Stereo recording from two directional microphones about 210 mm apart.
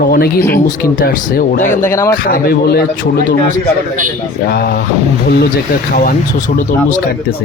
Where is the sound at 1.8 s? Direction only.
15° left (ahead or behind).